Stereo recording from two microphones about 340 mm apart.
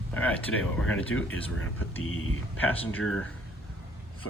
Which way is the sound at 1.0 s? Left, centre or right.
Left.